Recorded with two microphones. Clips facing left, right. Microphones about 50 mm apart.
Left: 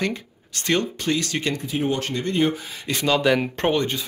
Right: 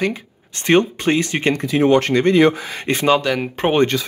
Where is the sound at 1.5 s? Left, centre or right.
Right.